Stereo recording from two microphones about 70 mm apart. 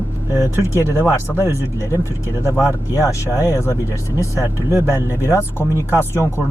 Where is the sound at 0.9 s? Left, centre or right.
Left.